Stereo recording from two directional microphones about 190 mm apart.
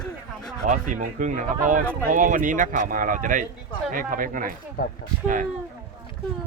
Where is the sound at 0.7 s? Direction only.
45° right (ahead or behind).